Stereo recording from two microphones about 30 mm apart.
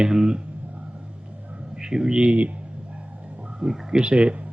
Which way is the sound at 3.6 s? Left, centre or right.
Right.